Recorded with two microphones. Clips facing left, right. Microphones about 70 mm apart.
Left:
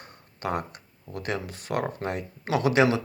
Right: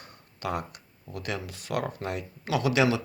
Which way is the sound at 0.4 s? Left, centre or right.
Left.